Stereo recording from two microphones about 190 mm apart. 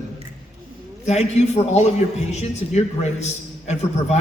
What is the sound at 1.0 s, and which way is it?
A man's voice, 35° left (ahead or behind).